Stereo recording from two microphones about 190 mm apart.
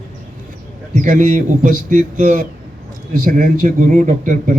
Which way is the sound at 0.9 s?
45° right (ahead or behind).